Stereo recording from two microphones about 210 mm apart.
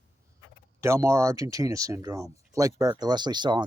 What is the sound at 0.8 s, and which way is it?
Speech, 15° right (ahead or behind).